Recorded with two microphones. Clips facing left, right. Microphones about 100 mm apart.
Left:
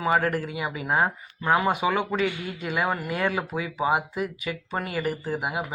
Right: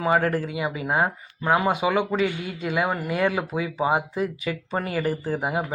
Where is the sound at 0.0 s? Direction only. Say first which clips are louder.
Right 2 dB; 30° right (ahead or behind).